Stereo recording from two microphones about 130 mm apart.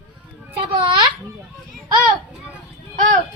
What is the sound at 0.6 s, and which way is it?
Speech, 40° right (ahead or behind).